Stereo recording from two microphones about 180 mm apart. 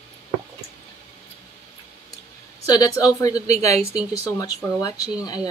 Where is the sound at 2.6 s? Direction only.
20° left (ahead or behind).